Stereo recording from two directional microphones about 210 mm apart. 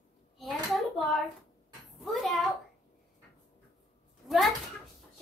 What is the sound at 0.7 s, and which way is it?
A woman's voice, centre (ahead or behind).